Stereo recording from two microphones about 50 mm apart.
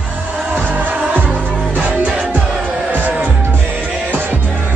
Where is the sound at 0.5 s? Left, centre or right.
Right.